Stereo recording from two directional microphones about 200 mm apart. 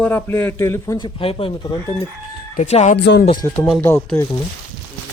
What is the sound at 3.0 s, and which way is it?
Speech, 60° left (ahead or behind).